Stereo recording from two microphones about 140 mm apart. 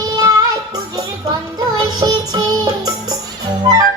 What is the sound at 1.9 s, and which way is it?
Music, 25° right (ahead or behind).